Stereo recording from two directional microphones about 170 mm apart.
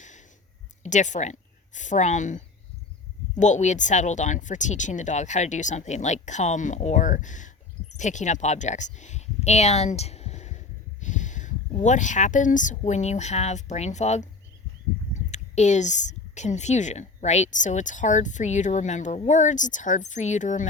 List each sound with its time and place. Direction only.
0.8 s speech: 45° left (ahead or behind)